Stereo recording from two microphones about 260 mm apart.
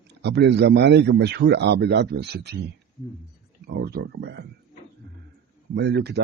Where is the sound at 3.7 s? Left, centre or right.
Right.